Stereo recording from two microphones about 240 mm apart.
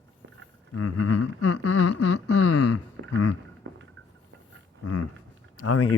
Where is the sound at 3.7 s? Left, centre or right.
Right.